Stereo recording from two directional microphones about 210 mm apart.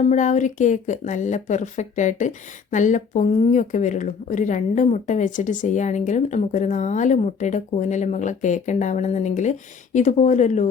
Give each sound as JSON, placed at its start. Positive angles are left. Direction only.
{"t": 0.0, "sound": "a woman's voice", "side_deg": 35}